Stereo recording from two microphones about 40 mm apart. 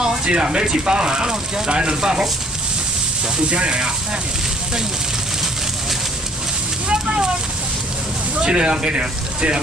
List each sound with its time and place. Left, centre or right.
0.0 s speech: centre
3.4 s speech: right
6.9 s speech: right
8.4 s speech: right